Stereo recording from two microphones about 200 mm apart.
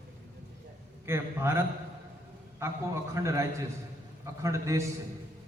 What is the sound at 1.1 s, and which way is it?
Speech, 10° right (ahead or behind).